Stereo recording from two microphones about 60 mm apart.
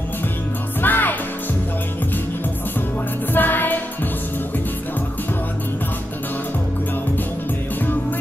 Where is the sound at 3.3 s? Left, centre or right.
Left.